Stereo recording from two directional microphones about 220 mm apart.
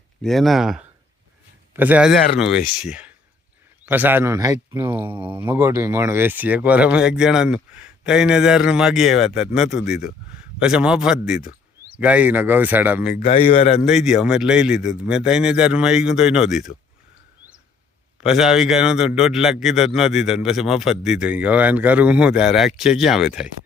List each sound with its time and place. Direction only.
0.2 s a man's voice: centre (ahead or behind)
13.1 s a man's voice: 30° left (ahead or behind)
13.8 s a man's voice: centre (ahead or behind)
18.2 s a man's voice: centre (ahead or behind)